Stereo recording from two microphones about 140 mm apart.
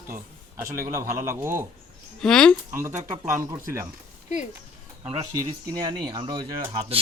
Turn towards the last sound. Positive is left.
turn(degrees=-40)  # may be behind; listen again after turning